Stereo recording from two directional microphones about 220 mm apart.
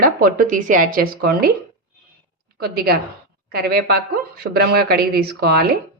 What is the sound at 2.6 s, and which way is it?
A woman's voice, 45° right (ahead or behind).